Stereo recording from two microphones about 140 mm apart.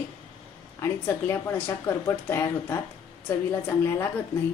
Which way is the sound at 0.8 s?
20° left (ahead or behind).